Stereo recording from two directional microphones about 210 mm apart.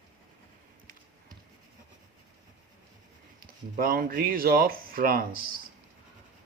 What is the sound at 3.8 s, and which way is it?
Speech, 45° right (ahead or behind).